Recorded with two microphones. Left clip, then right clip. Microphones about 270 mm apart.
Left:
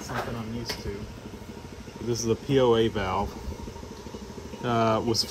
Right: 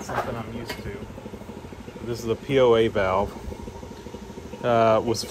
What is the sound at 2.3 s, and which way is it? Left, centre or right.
Speech, centre.